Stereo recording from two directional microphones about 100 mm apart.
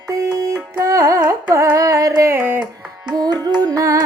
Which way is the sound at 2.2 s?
25° right (ahead or behind).